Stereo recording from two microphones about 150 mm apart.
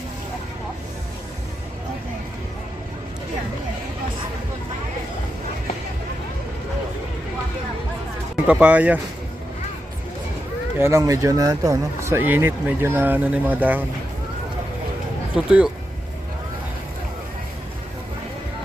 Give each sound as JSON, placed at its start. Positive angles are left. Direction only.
{"t": 8.4, "sound": "speech", "side_deg": -10}
{"t": 10.8, "sound": "speech", "side_deg": -20}
{"t": 15.4, "sound": "speech", "side_deg": -5}